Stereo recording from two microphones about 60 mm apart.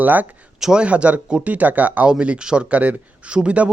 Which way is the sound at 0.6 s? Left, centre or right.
Centre.